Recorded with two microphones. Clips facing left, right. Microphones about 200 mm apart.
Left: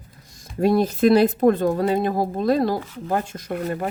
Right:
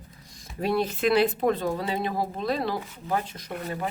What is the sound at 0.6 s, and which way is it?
Speech, 45° left (ahead or behind).